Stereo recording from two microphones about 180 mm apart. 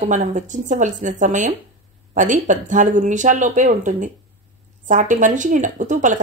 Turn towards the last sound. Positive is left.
turn(degrees=-45)  # may be behind; listen again after turning